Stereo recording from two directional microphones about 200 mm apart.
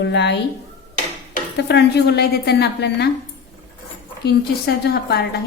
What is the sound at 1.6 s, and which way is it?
A woman's voice, 60° left (ahead or behind).